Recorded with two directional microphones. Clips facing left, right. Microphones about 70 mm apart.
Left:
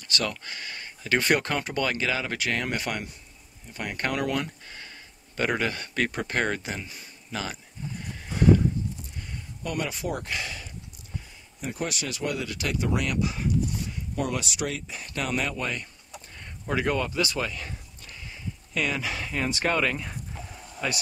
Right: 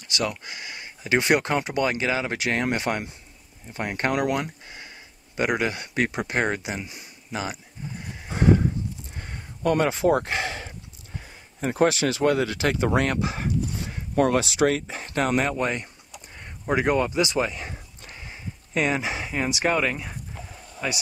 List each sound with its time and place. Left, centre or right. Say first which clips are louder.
0.1 s speech: right 2 dB; centre
8.3 s horse: even; right
9.1 s a sound: right 1 dB; right
10.2 s speech: right 5 dB; right
12.4 s speech: right 5 dB; right
13.9 s a sound: right 11 dB; right
14.4 s speech: right 10 dB; right
14.9 s speech: right 6 dB; right; by 21.0 s centre